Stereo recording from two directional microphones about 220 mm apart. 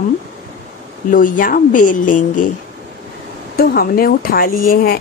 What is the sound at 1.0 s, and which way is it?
Speech, 35° left (ahead or behind).